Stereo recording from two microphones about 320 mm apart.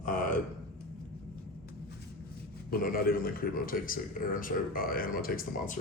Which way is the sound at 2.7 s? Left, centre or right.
Left.